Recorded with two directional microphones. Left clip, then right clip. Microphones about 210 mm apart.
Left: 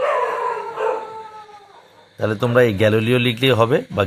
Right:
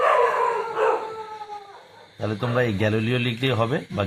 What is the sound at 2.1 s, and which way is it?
Speech, 45° left (ahead or behind).